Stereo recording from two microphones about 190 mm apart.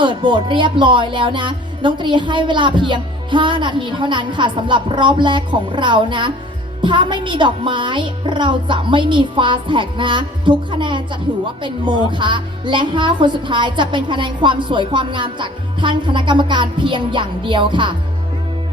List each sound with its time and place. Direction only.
0.0 s music: 25° right (ahead or behind)